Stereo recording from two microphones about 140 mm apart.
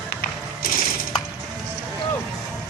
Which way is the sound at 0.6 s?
90° left.